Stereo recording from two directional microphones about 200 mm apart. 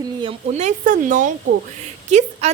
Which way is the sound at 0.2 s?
30° right (ahead or behind).